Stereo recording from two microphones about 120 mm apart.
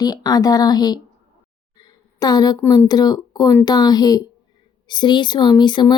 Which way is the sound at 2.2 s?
30° left (ahead or behind).